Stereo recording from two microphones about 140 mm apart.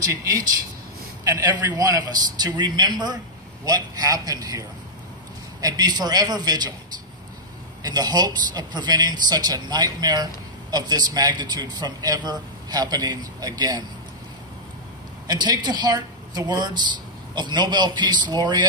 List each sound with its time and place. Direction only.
0.0 s a man's voice: 20° right (ahead or behind)
7.8 s a man's voice: 30° right (ahead or behind)
15.2 s a man's voice: 30° right (ahead or behind)